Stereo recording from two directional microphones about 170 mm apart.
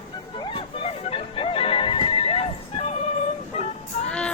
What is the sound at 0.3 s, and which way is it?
Music, 30° left (ahead or behind).